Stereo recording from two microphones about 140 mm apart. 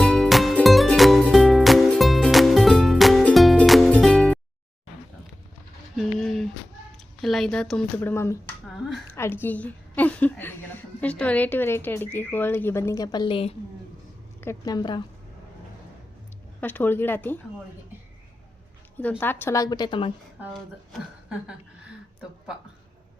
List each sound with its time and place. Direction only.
0.0 s music: 5° left (ahead or behind)
6.0 s a sound: centre (ahead or behind)
7.9 s a woman's voice: 15° left (ahead or behind)
8.6 s a sound: centre (ahead or behind)
9.1 s a woman's voice: 15° left (ahead or behind); by 13.6 s 40° left (ahead or behind)
14.6 s a woman's voice: 30° left (ahead or behind)
16.6 s a woman's voice: 15° left (ahead or behind)
18.9 s a woman's voice: 15° left (ahead or behind); by 20.1 s 35° left (ahead or behind)